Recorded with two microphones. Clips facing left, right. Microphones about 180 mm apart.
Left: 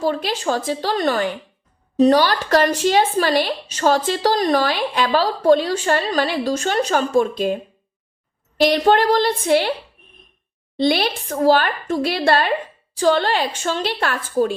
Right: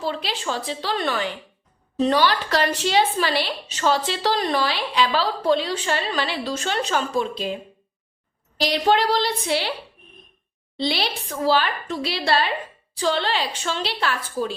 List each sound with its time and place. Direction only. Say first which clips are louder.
0.0 s a woman's voice: left 6 dB; 45° left (ahead or behind)
10.8 s a woman's voice: left 7 dB; 50° left (ahead or behind)